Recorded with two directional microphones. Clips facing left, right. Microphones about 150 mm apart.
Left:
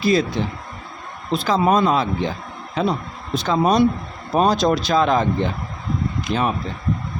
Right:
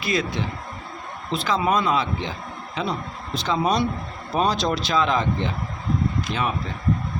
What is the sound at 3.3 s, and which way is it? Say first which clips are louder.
Speech: left 5 dB; 45° left (ahead or behind).